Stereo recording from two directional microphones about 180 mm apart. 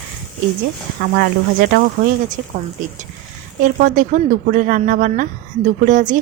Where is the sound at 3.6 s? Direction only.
45° right (ahead or behind).